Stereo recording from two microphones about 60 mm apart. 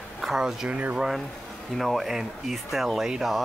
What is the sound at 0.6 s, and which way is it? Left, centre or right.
Speech, right.